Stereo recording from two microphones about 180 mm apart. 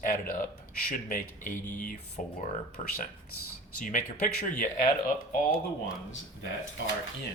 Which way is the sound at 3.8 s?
45° left (ahead or behind).